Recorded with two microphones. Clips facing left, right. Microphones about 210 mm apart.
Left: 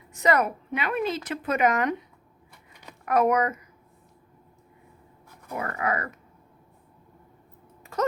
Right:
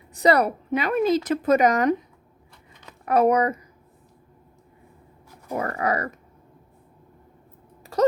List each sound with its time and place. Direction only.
0.1 s a woman's voice: 35° right (ahead or behind)
3.1 s a woman's voice: 30° right (ahead or behind)
5.5 s a woman's voice: 35° right (ahead or behind)
7.9 s speech: 35° right (ahead or behind)